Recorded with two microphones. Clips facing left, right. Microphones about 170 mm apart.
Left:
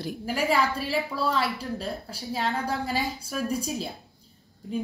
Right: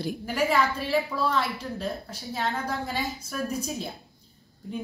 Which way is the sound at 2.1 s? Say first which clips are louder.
Left 1 dB; 35° left (ahead or behind).